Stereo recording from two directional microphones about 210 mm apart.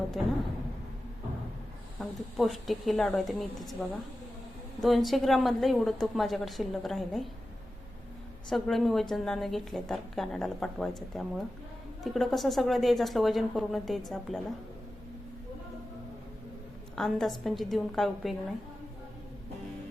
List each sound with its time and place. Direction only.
2.0 s a woman's voice: centre (ahead or behind)
8.4 s a woman's voice: centre (ahead or behind)
16.9 s a woman's voice: centre (ahead or behind)